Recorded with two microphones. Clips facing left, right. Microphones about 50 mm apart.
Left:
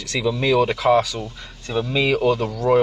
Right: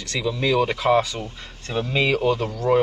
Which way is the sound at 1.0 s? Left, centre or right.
Right.